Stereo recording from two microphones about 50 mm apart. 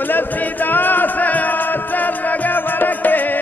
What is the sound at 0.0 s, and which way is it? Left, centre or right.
Music, left.